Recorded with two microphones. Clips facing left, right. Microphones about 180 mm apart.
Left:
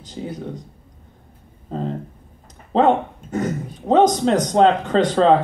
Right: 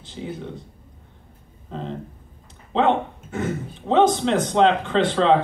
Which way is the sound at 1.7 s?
40° left (ahead or behind).